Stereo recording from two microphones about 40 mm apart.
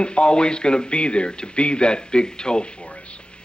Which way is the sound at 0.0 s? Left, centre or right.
Left.